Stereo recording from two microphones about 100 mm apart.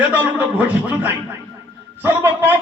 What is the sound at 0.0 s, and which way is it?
Speech, 15° right (ahead or behind).